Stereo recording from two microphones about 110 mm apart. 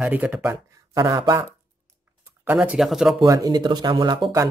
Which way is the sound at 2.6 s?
5° right (ahead or behind).